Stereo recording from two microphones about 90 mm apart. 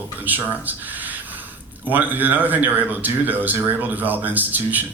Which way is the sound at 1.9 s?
20° right (ahead or behind).